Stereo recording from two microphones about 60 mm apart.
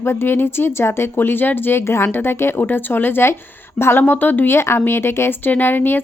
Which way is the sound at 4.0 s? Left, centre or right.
Left.